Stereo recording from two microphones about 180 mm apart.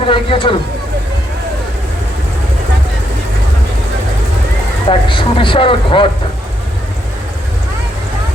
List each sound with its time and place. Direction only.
0.0 s speech: 30° left (ahead or behind)
4.9 s speech: 30° left (ahead or behind)